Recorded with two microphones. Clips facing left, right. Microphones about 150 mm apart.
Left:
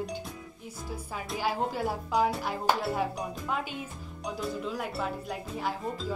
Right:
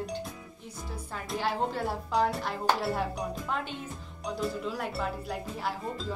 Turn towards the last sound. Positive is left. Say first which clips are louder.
# left 1 dB
turn(degrees=0)  # may be behind; listen again after turning